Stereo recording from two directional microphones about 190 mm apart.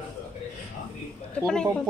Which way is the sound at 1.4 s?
5° left (ahead or behind).